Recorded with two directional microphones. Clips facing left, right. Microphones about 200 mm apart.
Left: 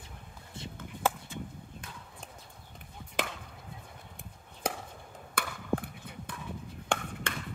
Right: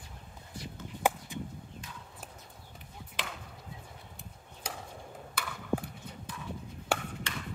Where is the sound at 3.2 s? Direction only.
45° left (ahead or behind).